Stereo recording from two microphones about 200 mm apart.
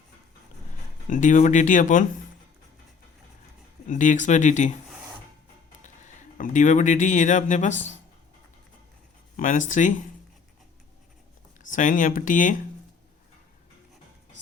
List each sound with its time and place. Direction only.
1.1 s speech: 40° left (ahead or behind)
3.8 s speech: 40° left (ahead or behind)
5.8 s speech: 40° left (ahead or behind)
9.4 s speech: 40° left (ahead or behind)
11.6 s speech: 40° left (ahead or behind)